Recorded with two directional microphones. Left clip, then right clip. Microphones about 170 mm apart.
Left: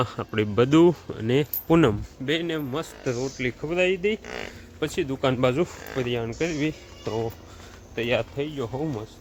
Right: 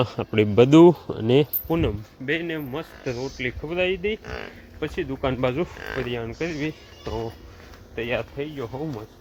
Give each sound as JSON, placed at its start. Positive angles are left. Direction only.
{"t": 0.0, "sound": "speech", "side_deg": -10}
{"t": 1.7, "sound": "speech", "side_deg": 60}
{"t": 2.2, "sound": "speech", "side_deg": 25}
{"t": 4.2, "sound": "speech", "side_deg": 10}